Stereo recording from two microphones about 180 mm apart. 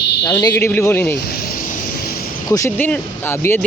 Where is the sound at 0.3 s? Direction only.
20° left (ahead or behind).